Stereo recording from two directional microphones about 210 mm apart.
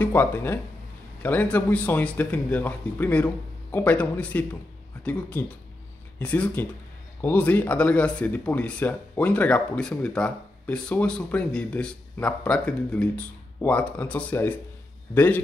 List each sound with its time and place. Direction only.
0.0 s speech: 10° left (ahead or behind)
6.1 s speech: 5° left (ahead or behind)